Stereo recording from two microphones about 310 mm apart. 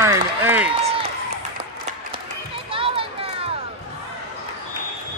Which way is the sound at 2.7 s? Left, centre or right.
Centre.